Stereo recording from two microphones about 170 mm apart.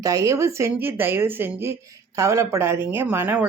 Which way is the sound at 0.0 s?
20° right (ahead or behind).